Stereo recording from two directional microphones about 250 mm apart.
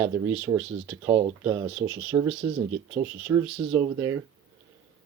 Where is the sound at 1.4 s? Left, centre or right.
Centre.